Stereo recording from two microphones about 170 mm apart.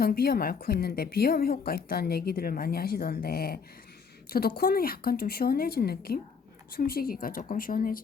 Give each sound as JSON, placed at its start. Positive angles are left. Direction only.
{"t": 0.0, "sound": "a woman's voice", "side_deg": 60}